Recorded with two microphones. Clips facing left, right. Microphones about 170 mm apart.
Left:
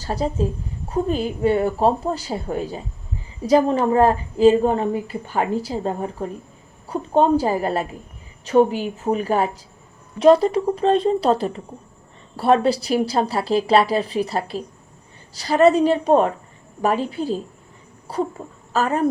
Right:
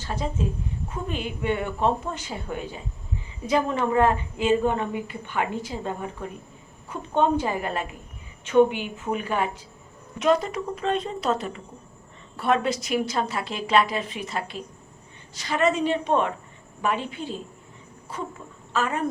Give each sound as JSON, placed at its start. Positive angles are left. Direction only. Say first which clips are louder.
{"t": 0.0, "sound": "a woman's voice", "louder": "left 6 dB", "side_deg": 35}